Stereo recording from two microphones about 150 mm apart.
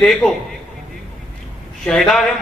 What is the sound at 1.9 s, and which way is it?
Speech, 5° left (ahead or behind).